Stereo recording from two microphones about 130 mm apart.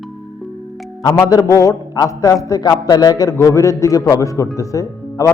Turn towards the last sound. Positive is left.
turn(degrees=25)  # may be behind; listen again after turning